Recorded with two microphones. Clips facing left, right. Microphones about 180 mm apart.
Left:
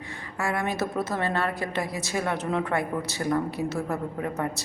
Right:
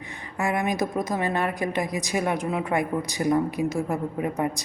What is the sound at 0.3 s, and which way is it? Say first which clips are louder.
A woman's voice: right 3 dB; 20° right (ahead or behind).